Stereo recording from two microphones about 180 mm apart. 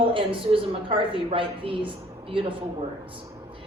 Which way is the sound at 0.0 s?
30° right (ahead or behind).